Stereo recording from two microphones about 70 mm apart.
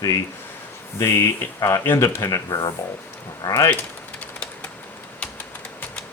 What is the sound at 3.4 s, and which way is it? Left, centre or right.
Speech, left.